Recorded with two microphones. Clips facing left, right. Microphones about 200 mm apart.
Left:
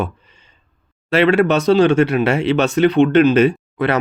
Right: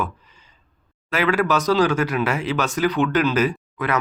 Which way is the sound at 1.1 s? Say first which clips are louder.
Left 6 dB; 30° left (ahead or behind).